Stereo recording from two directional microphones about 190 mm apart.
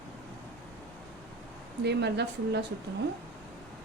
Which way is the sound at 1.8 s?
60° right (ahead or behind).